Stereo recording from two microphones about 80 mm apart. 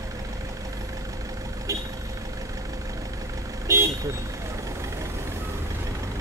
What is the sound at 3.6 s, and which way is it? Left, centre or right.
Vehicle, right.